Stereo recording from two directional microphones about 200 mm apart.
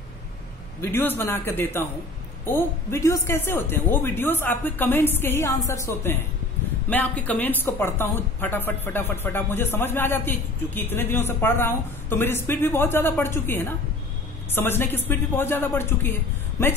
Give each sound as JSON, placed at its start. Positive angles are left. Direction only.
{"t": 0.7, "sound": "a woman's voice", "side_deg": 10}